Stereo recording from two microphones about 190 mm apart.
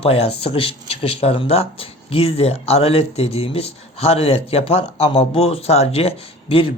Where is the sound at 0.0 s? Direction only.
30° left (ahead or behind).